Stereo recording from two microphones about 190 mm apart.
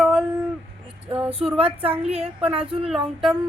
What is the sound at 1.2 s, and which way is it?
A woman's voice, 30° right (ahead or behind).